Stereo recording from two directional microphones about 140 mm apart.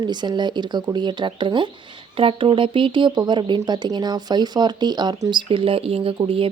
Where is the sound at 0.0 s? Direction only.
30° right (ahead or behind).